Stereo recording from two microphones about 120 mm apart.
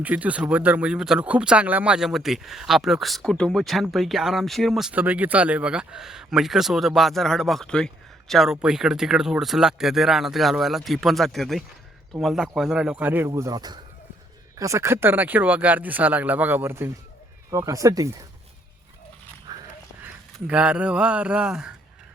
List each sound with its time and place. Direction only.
0.0 s speech: 15° right (ahead or behind)
4.9 s speech: 15° right (ahead or behind)
19.5 s biting: 30° right (ahead or behind)
20.0 s speech: 10° right (ahead or behind)